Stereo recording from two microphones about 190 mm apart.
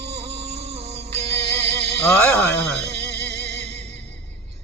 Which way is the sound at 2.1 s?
10° left (ahead or behind).